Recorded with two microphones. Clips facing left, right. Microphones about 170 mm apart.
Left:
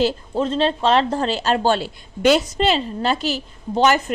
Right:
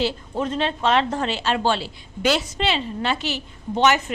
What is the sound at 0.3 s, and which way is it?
A woman's voice, 30° left (ahead or behind).